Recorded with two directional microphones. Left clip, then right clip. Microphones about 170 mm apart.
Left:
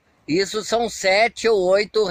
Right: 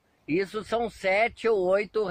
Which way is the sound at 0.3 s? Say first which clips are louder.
Left 7 dB; 20° left (ahead or behind).